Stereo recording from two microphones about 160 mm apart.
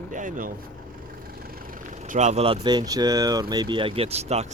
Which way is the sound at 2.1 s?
45° right (ahead or behind).